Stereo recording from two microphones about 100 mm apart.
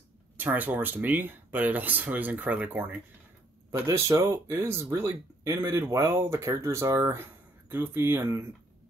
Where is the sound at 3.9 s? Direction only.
30° right (ahead or behind).